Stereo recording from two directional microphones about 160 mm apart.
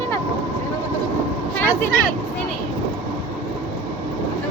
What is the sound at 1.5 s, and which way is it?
Vehicle, 10° left (ahead or behind).